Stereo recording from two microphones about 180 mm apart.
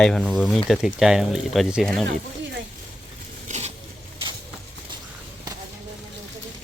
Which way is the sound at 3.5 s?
40° right (ahead or behind).